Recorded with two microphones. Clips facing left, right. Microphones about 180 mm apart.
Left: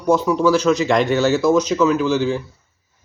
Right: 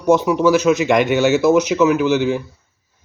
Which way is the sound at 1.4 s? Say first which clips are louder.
Right 2 dB; 10° right (ahead or behind).